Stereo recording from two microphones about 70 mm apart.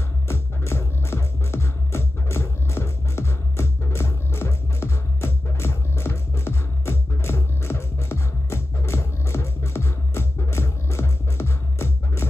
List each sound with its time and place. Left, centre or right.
0.3 s music: left